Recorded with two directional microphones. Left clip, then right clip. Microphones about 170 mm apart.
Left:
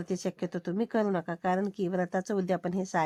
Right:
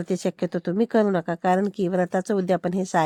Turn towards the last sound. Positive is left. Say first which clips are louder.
# right 7 dB
turn(degrees=-30)  # may be behind; listen again after turning